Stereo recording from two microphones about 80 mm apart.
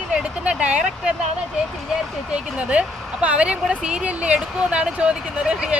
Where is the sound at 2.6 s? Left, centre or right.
Centre.